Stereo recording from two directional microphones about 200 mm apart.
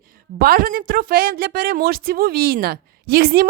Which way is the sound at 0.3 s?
45° right (ahead or behind).